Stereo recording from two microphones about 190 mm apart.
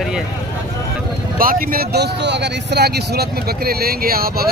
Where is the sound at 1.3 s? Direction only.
50° right (ahead or behind).